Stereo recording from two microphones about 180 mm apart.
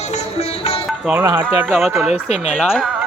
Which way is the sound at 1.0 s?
10° right (ahead or behind).